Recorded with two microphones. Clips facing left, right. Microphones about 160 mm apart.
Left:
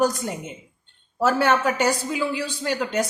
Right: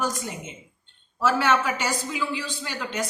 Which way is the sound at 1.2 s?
40° left (ahead or behind).